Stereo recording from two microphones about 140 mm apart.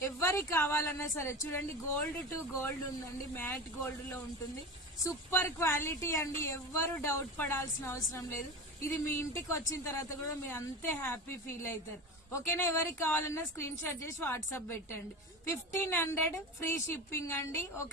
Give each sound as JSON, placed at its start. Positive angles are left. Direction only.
{"t": 0.0, "sound": "a woman's voice", "side_deg": 20}
{"t": 3.3, "sound": "speech", "side_deg": 15}
{"t": 5.0, "sound": "speech", "side_deg": 15}